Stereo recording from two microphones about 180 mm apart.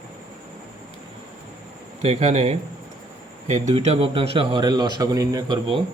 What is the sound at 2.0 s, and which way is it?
A man's voice, 40° right (ahead or behind).